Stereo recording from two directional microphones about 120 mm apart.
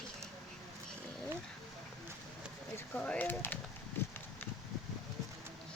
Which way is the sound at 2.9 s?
10° left (ahead or behind).